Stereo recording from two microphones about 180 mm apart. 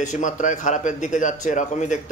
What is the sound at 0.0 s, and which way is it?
A man's voice, 45° left (ahead or behind).